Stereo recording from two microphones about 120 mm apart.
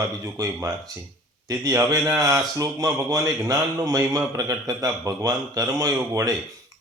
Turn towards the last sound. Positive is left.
turn(degrees=-25)  # may be behind; listen again after turning